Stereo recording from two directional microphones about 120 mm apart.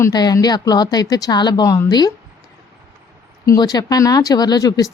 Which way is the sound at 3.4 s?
30° left (ahead or behind).